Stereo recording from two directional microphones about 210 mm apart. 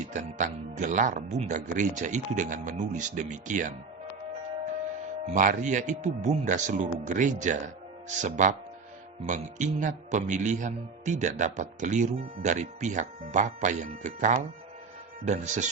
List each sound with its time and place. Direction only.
0.1 s a man's voice: 35° right (ahead or behind)
5.2 s a man's voice: 35° right (ahead or behind)